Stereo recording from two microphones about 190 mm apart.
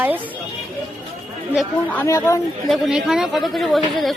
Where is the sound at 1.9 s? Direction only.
10° left (ahead or behind).